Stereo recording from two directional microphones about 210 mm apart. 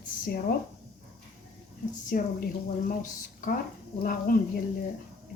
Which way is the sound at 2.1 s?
45° left (ahead or behind).